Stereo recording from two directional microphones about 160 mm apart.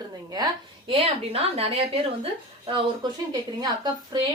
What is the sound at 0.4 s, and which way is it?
Speech, 25° right (ahead or behind).